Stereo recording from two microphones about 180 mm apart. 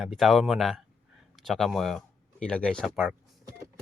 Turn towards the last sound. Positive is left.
turn(degrees=5)  # may be behind; listen again after turning